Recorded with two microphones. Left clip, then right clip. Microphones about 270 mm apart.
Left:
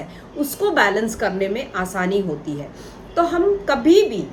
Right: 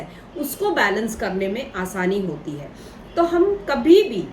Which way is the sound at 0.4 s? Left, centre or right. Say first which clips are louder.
Left 2 dB; centre.